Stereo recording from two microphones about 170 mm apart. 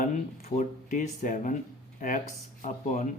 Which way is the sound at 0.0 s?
50° left (ahead or behind).